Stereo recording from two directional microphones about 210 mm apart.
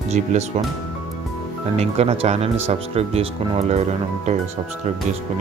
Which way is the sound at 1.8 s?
30° right (ahead or behind).